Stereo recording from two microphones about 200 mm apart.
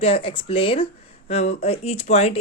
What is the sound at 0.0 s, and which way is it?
A woman's voice, 30° left (ahead or behind).